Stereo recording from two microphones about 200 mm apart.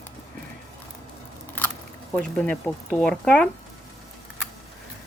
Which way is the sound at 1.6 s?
10° left (ahead or behind).